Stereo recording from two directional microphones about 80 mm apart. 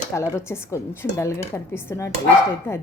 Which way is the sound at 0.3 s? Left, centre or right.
Left.